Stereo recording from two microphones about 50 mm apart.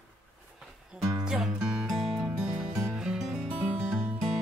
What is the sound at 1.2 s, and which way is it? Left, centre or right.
Music, centre.